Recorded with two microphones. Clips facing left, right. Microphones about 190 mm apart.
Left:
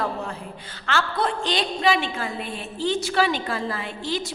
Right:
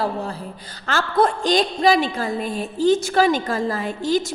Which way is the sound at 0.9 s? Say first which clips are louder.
Right 5 dB; 45° right (ahead or behind).